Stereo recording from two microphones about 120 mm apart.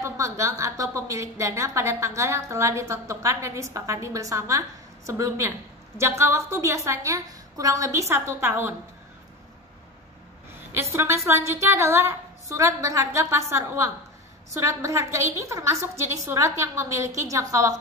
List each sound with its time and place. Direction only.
0.0 s a woman's voice: 25° right (ahead or behind)
10.7 s a woman's voice: 20° right (ahead or behind)